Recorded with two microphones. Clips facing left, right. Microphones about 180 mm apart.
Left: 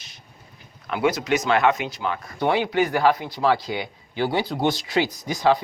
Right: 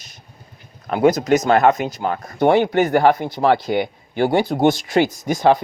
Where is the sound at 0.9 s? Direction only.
40° right (ahead or behind).